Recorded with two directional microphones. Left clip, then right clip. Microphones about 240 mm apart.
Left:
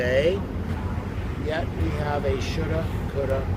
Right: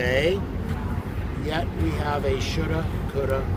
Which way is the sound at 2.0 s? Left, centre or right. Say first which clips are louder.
Even; right.